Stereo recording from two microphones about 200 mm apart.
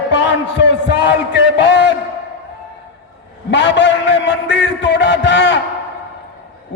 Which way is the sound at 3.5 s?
60° left (ahead or behind).